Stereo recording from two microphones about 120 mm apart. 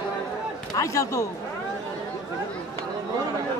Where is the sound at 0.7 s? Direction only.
25° left (ahead or behind).